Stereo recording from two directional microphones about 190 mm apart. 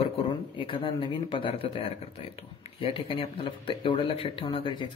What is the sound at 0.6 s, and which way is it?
Speech, 25° left (ahead or behind).